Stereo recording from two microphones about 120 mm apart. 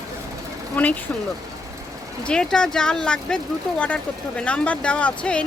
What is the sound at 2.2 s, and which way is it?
Speech, 5° left (ahead or behind).